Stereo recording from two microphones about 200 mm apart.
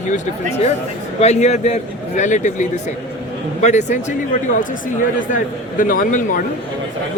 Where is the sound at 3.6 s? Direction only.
35° left (ahead or behind).